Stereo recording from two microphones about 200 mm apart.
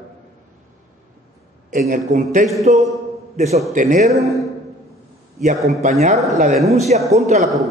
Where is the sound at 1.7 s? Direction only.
40° right (ahead or behind).